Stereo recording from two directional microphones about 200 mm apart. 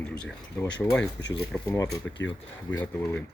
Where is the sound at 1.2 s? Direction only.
60° left (ahead or behind).